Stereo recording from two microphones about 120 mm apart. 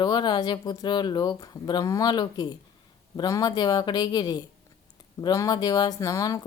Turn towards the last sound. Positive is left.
turn(degrees=30)  # may be behind; listen again after turning